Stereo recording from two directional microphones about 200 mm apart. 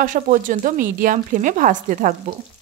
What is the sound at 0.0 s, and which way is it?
Speech, 40° right (ahead or behind).